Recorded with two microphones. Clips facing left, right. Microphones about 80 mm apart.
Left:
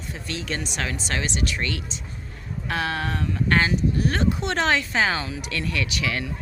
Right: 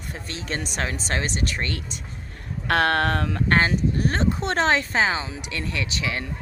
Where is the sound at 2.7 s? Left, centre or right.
Right.